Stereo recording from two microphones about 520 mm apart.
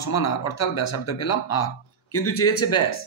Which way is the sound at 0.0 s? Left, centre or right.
Left.